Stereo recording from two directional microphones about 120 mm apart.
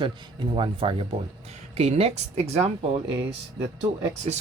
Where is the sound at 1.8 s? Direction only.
60° right (ahead or behind).